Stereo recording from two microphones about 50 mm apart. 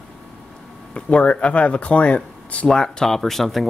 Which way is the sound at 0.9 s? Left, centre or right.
Left.